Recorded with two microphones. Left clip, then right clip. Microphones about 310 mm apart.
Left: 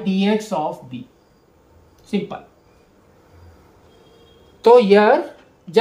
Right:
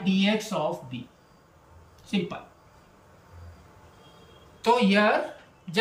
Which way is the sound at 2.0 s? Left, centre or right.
Centre.